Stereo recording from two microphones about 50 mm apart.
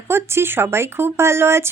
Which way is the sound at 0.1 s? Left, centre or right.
Right.